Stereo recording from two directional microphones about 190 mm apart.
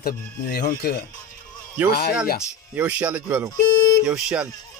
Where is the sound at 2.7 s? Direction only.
10° right (ahead or behind).